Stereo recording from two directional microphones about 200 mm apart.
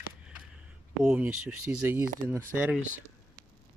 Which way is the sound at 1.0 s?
5° right (ahead or behind).